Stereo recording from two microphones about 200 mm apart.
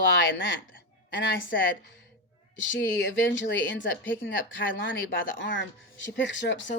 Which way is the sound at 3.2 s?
65° left (ahead or behind).